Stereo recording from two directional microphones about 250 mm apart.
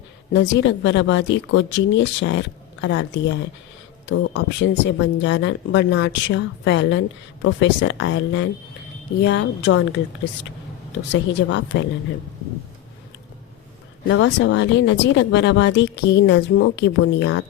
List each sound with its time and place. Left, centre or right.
0.3 s speech: left
11.1 s speech: left
14.1 s speech: left